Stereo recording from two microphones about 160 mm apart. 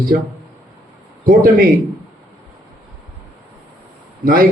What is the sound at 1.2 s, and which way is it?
Speech, 60° right (ahead or behind).